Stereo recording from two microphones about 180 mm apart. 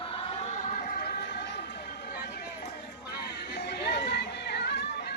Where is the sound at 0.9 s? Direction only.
60° left (ahead or behind).